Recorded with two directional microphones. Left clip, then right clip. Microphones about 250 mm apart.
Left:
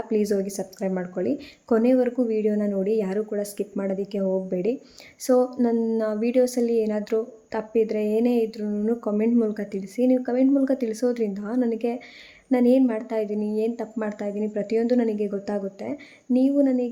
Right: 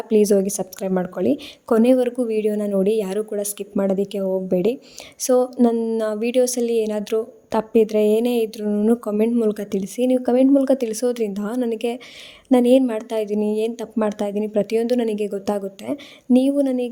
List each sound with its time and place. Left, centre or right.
0.1 s a woman's voice: right